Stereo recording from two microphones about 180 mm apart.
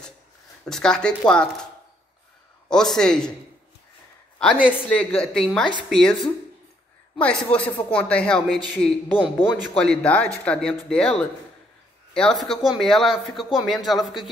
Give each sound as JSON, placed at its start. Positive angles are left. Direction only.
{"t": 0.7, "sound": "speech", "side_deg": 5}
{"t": 2.7, "sound": "speech", "side_deg": 5}
{"t": 4.8, "sound": "speech", "side_deg": 5}
{"t": 7.2, "sound": "speech", "side_deg": 5}